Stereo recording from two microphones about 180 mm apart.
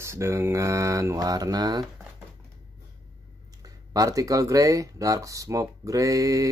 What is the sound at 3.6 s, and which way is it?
Speech, 20° right (ahead or behind).